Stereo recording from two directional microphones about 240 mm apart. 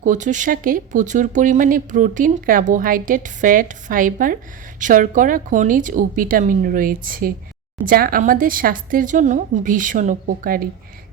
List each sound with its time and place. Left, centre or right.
0.0 s speech: right